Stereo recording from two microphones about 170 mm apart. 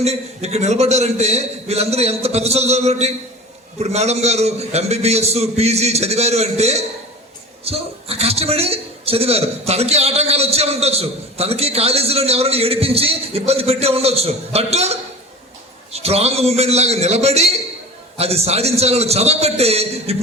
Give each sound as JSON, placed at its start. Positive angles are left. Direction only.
{"t": 0.0, "sound": "a man's voice", "side_deg": -40}